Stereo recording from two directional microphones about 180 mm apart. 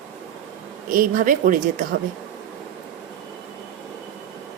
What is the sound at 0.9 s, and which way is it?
Speech, 50° right (ahead or behind).